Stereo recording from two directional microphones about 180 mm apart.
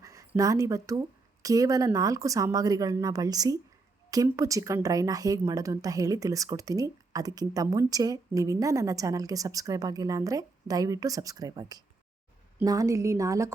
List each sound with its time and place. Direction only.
0.0 s a woman's voice: 20° right (ahead or behind)